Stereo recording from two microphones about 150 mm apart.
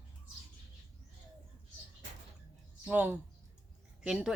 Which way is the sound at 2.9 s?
10° right (ahead or behind).